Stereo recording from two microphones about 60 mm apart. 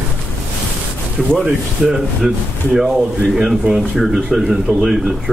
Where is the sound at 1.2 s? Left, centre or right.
Centre.